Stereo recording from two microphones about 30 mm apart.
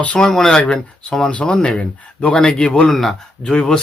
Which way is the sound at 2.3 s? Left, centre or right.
Left.